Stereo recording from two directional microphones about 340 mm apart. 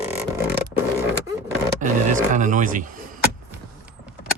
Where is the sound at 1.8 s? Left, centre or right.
Right.